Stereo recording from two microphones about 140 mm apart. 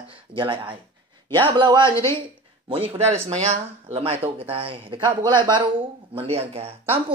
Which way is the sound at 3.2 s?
55° right (ahead or behind).